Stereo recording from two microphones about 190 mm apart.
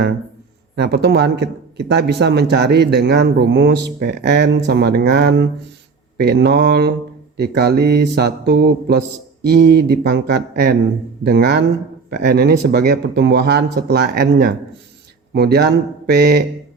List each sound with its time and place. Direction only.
0.8 s speech: 60° right (ahead or behind)